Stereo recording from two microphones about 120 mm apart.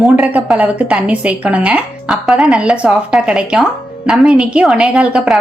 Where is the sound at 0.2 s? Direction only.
10° right (ahead or behind).